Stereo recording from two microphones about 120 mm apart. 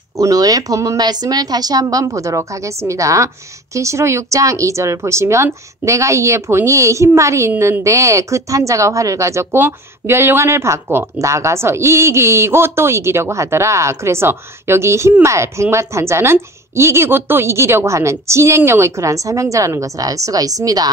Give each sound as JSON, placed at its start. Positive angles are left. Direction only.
{"t": 0.2, "sound": "a woman's voice", "side_deg": -30}